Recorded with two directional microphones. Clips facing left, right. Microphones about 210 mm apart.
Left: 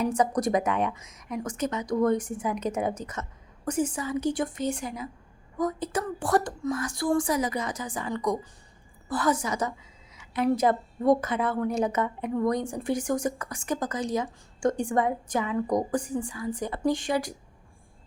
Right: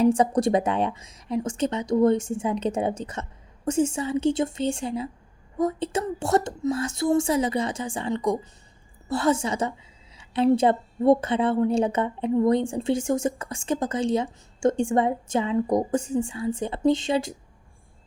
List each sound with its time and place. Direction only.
0.0 s a woman's voice: 30° right (ahead or behind)